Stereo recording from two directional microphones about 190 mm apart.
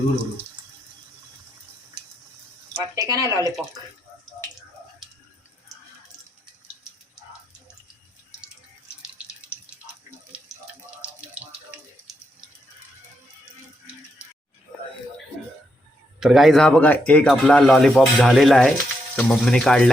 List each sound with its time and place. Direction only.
2.7 s speech: 20° right (ahead or behind)
16.2 s speech: centre (ahead or behind)